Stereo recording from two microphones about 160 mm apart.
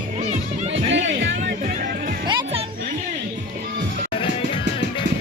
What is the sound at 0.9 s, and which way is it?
Music, 90° right.